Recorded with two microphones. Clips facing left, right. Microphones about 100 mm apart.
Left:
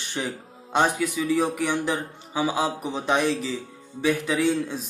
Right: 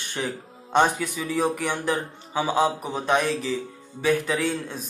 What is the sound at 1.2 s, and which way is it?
Speech, centre (ahead or behind).